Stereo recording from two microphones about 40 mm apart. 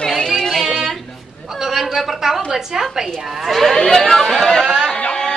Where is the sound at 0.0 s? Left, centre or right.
Centre.